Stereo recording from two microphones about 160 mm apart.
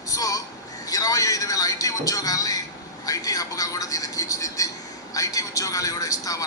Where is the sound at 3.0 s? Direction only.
20° left (ahead or behind).